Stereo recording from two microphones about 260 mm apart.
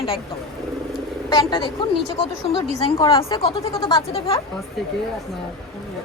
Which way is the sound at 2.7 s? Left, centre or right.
Centre.